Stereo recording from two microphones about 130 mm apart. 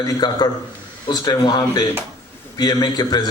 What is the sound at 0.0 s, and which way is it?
A man's voice, 30° left (ahead or behind).